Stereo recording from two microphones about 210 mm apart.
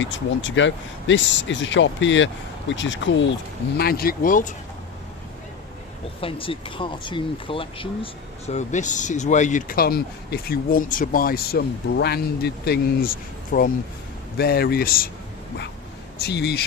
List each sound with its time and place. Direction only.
0.0 s speech: 60° left (ahead or behind)
3.8 s speech: 45° left (ahead or behind)
6.1 s speech: 25° left (ahead or behind); by 13.1 s 50° left (ahead or behind)
13.5 s speech: 40° left (ahead or behind)
16.2 s speech: 50° left (ahead or behind)